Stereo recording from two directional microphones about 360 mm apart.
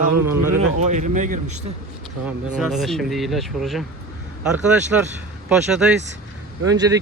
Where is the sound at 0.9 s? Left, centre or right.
Centre.